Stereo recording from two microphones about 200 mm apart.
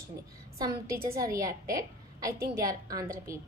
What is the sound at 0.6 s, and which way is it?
Speech, 20° right (ahead or behind).